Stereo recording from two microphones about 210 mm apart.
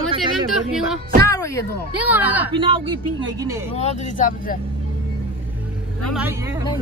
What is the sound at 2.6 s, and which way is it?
A man's voice, 25° right (ahead or behind).